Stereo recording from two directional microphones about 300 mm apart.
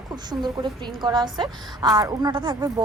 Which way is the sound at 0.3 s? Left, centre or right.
Centre.